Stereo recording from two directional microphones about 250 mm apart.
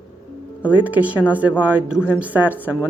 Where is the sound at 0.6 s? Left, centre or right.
Centre.